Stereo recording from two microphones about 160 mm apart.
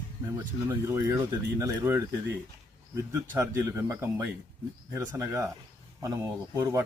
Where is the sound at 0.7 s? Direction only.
15° right (ahead or behind).